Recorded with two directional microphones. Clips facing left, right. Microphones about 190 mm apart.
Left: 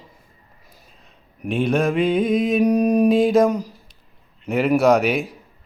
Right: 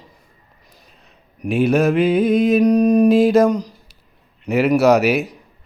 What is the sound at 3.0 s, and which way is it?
Speech, centre (ahead or behind).